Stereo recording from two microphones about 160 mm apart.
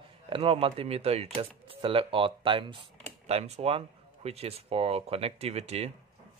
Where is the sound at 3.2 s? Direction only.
40° right (ahead or behind).